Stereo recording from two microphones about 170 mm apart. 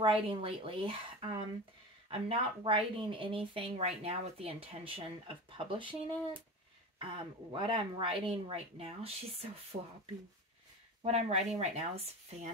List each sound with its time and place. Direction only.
0.0 s speech: 30° right (ahead or behind)
7.5 s speech: 30° right (ahead or behind)
11.0 s speech: 40° right (ahead or behind)